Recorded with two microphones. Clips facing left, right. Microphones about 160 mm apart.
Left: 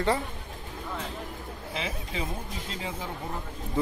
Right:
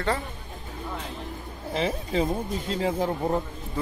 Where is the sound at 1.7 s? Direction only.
40° right (ahead or behind).